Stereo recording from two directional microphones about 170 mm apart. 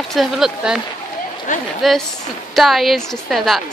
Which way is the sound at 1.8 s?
Centre (ahead or behind).